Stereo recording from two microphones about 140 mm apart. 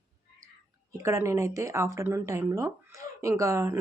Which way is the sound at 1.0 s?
20° right (ahead or behind).